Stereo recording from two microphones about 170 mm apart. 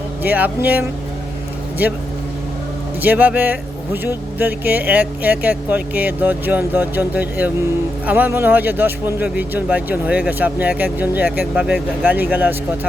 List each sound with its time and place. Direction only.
0.2 s speech: 10° right (ahead or behind)
3.0 s speech: 10° right (ahead or behind)